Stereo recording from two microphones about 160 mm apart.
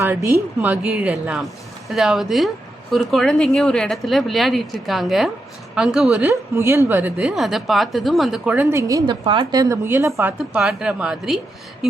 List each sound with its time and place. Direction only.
0.6 s speech: 5° right (ahead or behind)
6.6 s speech: 15° right (ahead or behind)
8.7 s a woman's voice: 20° right (ahead or behind)
10.3 s speech: centre (ahead or behind)